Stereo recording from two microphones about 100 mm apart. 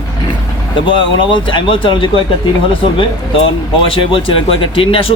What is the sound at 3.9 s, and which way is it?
A man's voice, 60° left (ahead or behind).